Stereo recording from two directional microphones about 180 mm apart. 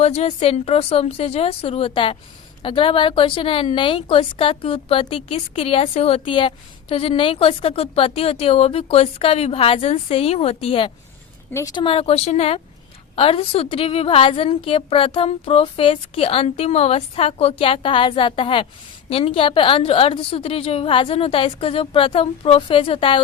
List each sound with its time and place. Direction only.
0.0 s a woman's voice: 35° left (ahead or behind)